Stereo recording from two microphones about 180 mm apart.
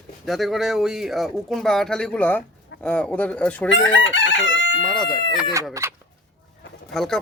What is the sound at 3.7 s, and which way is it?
Chicken, 90° left.